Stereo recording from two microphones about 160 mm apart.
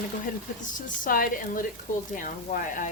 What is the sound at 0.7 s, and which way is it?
A woman's voice, 60° left (ahead or behind).